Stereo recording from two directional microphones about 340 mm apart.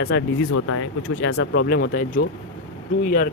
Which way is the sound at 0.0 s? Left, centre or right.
Left.